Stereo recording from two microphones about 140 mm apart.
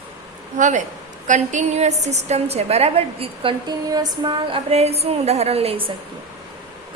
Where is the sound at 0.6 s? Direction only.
60° right (ahead or behind); by 4.6 s 30° right (ahead or behind).